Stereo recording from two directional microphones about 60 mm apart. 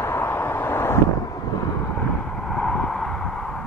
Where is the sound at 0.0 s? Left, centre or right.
Left.